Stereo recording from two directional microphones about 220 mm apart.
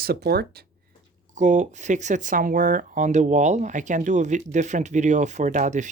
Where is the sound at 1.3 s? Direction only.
35° right (ahead or behind).